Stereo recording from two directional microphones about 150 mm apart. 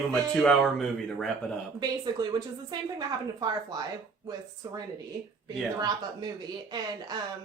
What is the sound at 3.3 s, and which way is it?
Speech, 25° right (ahead or behind).